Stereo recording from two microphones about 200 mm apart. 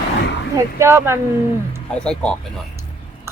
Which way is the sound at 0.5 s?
15° right (ahead or behind).